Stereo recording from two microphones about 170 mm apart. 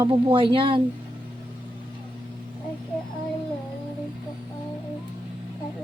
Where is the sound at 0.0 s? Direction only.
30° right (ahead or behind).